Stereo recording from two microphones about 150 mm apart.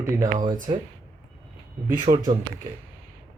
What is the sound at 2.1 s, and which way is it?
Speech, 30° right (ahead or behind).